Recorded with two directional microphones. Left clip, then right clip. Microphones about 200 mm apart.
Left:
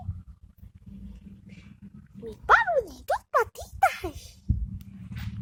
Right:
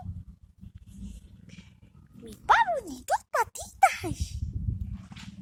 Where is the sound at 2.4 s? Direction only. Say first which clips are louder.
Left 2 dB; 10° left (ahead or behind).